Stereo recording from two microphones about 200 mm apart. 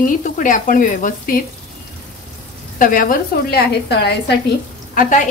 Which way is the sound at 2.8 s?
45° left (ahead or behind).